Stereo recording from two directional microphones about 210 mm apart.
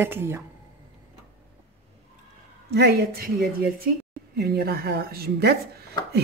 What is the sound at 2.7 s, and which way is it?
A woman's voice, 50° right (ahead or behind).